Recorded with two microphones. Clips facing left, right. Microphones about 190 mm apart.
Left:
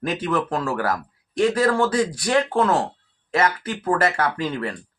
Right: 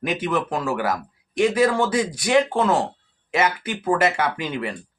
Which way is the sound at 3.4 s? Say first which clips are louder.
Even; 10° right (ahead or behind).